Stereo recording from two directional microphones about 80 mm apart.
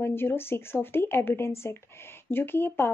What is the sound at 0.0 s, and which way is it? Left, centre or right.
Speech, left.